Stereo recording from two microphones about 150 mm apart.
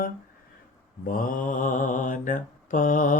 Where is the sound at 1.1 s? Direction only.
65° left (ahead or behind).